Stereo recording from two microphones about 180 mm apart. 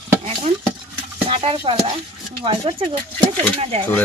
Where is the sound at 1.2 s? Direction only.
30° right (ahead or behind).